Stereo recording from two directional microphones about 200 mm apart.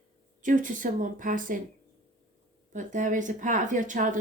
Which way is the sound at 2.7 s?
40° right (ahead or behind).